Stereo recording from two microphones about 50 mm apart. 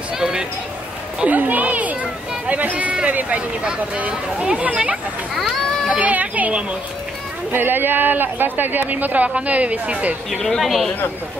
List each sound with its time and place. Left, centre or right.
0.2 s a sound: centre
1.2 s speech: right
7.5 s speech: right
10.4 s speech: centre